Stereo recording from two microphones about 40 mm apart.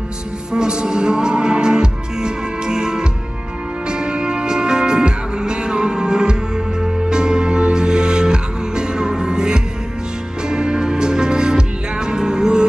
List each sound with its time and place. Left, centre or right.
0.5 s music: centre